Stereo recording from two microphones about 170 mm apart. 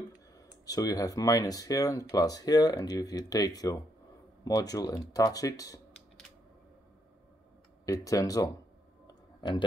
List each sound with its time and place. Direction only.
0.7 s speech: 20° left (ahead or behind)
7.8 s speech: 20° left (ahead or behind)
9.0 s a sound: 25° left (ahead or behind)